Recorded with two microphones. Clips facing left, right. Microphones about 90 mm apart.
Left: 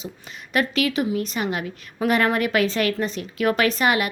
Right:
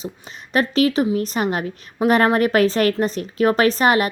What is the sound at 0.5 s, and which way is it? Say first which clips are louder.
A woman's voice: right 4 dB; 35° right (ahead or behind).